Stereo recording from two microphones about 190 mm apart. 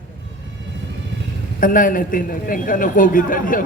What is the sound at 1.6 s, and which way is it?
A man's voice, 45° left (ahead or behind).